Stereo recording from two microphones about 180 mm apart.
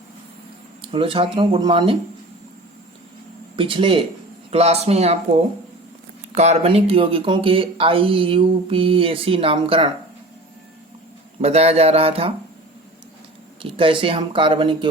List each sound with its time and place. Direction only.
0.8 s speech: 30° right (ahead or behind)
3.5 s speech: 30° right (ahead or behind)
11.3 s speech: 35° right (ahead or behind)
13.6 s speech: 30° right (ahead or behind)